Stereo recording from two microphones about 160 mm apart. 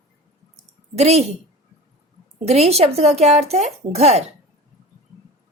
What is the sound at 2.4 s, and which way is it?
Speech, 40° right (ahead or behind).